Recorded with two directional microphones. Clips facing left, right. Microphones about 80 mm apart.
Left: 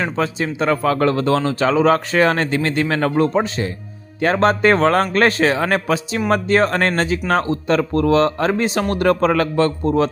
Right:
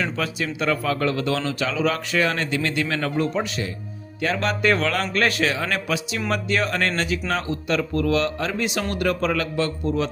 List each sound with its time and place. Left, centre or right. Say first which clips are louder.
0.0 s speech: left 5 dB; left